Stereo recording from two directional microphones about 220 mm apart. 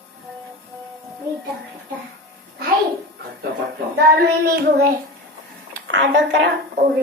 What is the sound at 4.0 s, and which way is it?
Child singing, 45° right (ahead or behind).